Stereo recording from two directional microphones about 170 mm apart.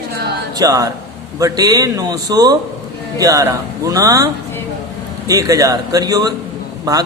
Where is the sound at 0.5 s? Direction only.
20° right (ahead or behind).